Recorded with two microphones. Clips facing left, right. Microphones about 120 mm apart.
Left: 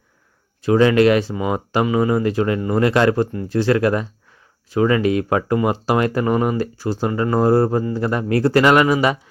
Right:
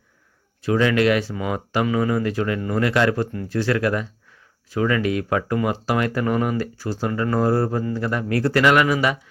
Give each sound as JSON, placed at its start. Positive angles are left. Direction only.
{"t": 0.6, "sound": "speech", "side_deg": 30}